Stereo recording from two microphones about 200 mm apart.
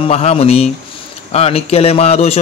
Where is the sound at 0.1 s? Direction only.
30° left (ahead or behind).